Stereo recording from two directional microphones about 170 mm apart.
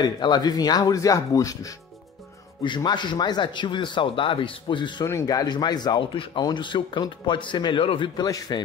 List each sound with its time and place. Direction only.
0.0 s speech: 25° left (ahead or behind)